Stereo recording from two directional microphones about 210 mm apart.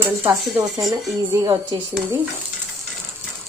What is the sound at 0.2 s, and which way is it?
Speech, 10° right (ahead or behind).